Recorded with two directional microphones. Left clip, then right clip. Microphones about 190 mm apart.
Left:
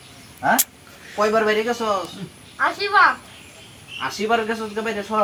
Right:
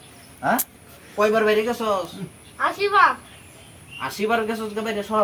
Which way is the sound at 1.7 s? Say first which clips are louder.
Left 1 dB; 30° right (ahead or behind).